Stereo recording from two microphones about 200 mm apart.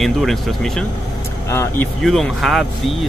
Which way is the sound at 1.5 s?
10° left (ahead or behind).